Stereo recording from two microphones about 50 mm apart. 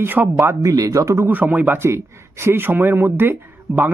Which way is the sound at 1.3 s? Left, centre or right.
Right.